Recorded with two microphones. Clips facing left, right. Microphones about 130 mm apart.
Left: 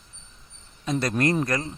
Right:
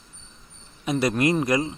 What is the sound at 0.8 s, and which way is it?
Speech, 10° right (ahead or behind).